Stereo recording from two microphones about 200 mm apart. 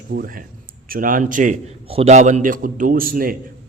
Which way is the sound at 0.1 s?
45° right (ahead or behind).